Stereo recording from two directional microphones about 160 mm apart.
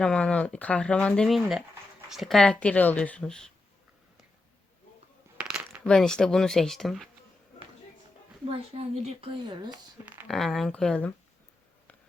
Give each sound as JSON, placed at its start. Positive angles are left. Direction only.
{"t": 0.0, "sound": "speech", "side_deg": 5}
{"t": 5.4, "sound": "a sound", "side_deg": -5}
{"t": 5.8, "sound": "speech", "side_deg": 5}
{"t": 8.4, "sound": "speech", "side_deg": -40}
{"t": 10.2, "sound": "speech", "side_deg": 0}